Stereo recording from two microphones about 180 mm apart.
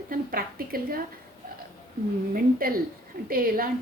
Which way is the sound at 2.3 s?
55° right (ahead or behind).